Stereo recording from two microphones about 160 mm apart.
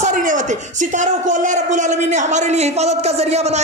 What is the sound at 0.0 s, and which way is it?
Speech, 55° right (ahead or behind).